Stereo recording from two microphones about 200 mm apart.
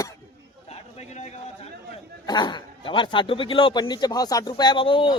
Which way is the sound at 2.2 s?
20° left (ahead or behind).